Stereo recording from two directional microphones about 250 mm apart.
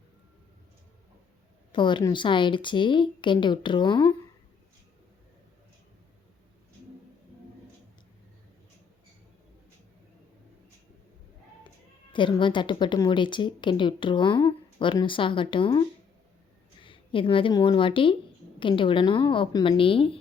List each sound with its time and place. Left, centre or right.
1.7 s a woman's voice: centre
12.1 s a woman's voice: centre
16.8 s a woman's voice: centre